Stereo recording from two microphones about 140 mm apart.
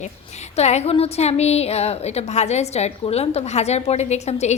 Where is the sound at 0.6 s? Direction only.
50° left (ahead or behind).